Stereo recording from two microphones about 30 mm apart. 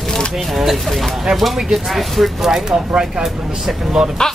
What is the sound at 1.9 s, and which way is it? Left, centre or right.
Speech, centre.